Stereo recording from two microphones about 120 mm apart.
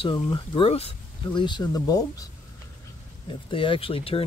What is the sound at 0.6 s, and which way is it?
Speech, 55° left (ahead or behind).